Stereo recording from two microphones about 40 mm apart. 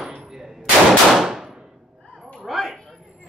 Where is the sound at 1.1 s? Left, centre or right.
Centre.